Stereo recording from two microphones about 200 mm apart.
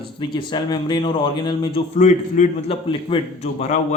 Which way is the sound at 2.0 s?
35° left (ahead or behind).